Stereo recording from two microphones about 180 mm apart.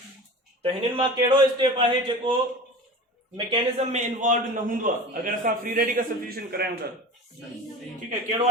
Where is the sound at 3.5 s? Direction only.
40° right (ahead or behind); by 6.6 s 55° right (ahead or behind).